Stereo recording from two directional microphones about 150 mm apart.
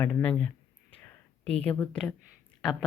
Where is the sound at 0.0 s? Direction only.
10° left (ahead or behind).